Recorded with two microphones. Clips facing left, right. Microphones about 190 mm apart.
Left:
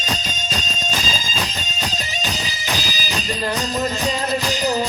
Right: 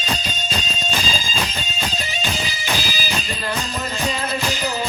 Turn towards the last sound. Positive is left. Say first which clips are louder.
# right 1 dB
turn(degrees=40)  # may be behind; listen again after turning